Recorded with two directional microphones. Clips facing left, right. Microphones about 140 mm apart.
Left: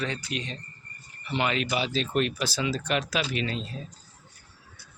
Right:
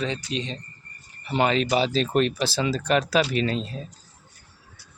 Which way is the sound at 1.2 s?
35° right (ahead or behind).